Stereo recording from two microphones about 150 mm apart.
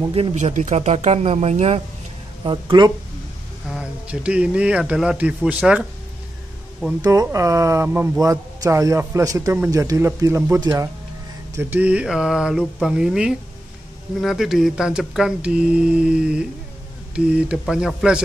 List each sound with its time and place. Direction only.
0.1 s speech: 45° right (ahead or behind)
2.4 s speech: 30° right (ahead or behind)
3.7 s a man's voice: 10° right (ahead or behind)
7.0 s a man's voice: 25° right (ahead or behind)
11.5 s mantra: 10° right (ahead or behind)